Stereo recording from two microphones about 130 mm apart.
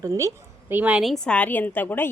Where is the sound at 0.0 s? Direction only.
25° right (ahead or behind); by 1.1 s 10° right (ahead or behind).